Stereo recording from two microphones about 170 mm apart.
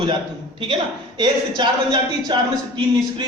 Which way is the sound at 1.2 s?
25° right (ahead or behind).